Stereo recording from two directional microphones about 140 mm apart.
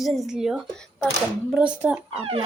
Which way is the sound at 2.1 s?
40° right (ahead or behind).